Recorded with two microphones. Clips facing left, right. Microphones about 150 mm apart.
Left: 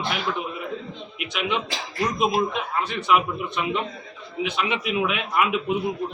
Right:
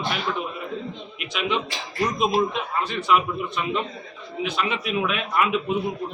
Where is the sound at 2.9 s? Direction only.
10° left (ahead or behind).